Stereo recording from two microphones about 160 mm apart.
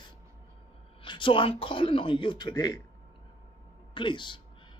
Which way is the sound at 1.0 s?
30° left (ahead or behind).